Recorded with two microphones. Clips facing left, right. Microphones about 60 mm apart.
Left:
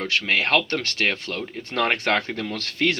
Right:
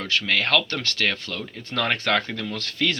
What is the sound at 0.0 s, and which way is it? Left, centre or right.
Speech, left.